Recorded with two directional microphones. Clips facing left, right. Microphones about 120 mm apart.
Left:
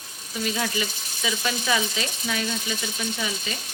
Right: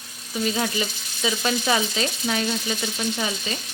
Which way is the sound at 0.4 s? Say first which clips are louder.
Right 2 dB; 35° right (ahead or behind).